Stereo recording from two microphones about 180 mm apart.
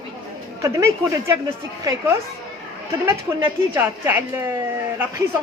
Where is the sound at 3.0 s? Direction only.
15° right (ahead or behind).